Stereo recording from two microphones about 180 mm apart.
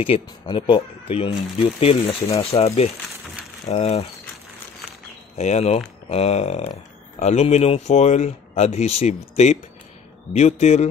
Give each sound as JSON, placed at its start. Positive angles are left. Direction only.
{"t": 0.0, "sound": "speech", "side_deg": 30}
{"t": 5.4, "sound": "speech", "side_deg": 40}